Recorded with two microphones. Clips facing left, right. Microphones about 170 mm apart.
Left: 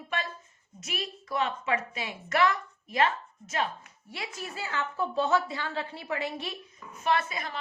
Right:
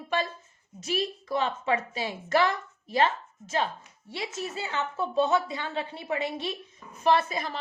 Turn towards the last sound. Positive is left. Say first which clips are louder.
# right 4 dB
turn(degrees=-35)  # may be behind; listen again after turning